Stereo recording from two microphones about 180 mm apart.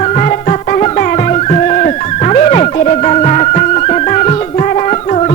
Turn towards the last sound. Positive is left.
turn(degrees=35)  # may be behind; listen again after turning